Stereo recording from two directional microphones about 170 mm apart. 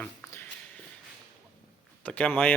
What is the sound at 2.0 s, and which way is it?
Speech, 10° left (ahead or behind).